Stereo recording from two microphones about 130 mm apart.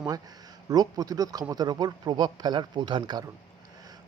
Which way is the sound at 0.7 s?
30° right (ahead or behind).